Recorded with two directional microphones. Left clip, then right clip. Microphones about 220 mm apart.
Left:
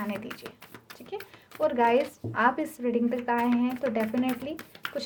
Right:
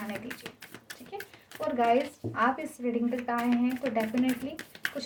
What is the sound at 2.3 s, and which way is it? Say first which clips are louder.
A woman's voice: left 3 dB; 55° left (ahead or behind).